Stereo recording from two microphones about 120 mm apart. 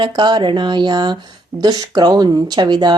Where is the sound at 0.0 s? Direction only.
40° right (ahead or behind).